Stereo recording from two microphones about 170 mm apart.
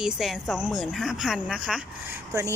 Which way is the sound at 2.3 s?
15° right (ahead or behind).